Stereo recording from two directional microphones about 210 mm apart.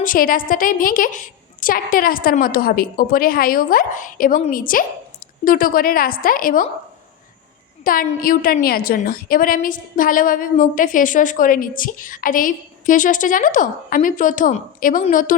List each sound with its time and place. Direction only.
0.0 s a woman's voice: 40° left (ahead or behind)
7.9 s a woman's voice: 40° left (ahead or behind)